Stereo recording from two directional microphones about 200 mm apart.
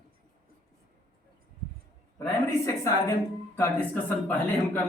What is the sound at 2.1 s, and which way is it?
Speech, 15° left (ahead or behind).